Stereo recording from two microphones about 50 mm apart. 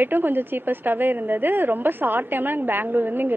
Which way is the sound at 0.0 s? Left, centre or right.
Right.